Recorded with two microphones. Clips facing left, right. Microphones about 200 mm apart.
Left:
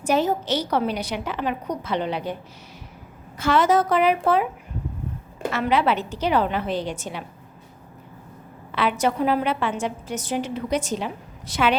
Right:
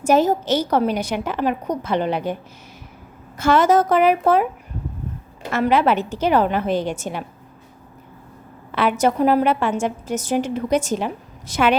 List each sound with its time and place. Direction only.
0.0 s a woman's voice: 45° right (ahead or behind)
3.3 s a woman's voice: 45° right (ahead or behind)
5.5 s a woman's voice: 45° right (ahead or behind)
8.7 s a woman's voice: 45° right (ahead or behind)